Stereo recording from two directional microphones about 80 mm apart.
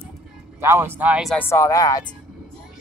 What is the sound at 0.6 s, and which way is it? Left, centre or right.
Speech, right.